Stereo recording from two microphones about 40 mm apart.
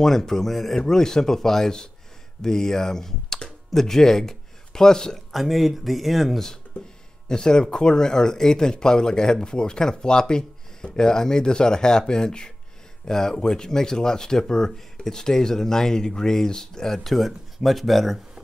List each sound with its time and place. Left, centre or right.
0.0 s speech: centre
5.3 s speech: centre
6.7 s speech: left
7.2 s speech: centre